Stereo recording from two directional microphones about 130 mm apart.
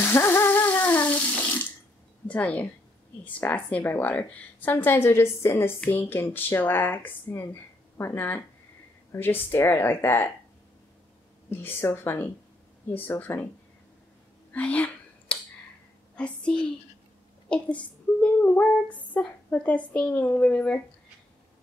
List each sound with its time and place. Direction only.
0.0 s bathtub: 20° left (ahead or behind)
2.2 s a woman's voice: 10° left (ahead or behind)
3.3 s female singing: 10° left (ahead or behind)
11.6 s female singing: 15° left (ahead or behind)
14.5 s whispering: 10° left (ahead or behind)
16.2 s female singing: 10° left (ahead or behind)